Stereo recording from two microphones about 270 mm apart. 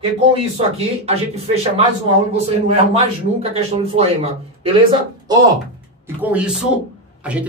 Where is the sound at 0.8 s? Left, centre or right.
Right.